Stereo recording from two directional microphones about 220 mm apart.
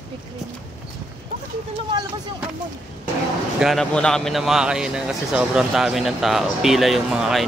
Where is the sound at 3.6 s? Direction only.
Centre (ahead or behind).